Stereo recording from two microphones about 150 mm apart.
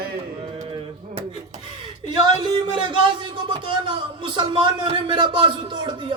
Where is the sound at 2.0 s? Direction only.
35° right (ahead or behind).